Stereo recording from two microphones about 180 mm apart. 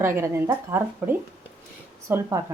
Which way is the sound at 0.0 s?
15° right (ahead or behind).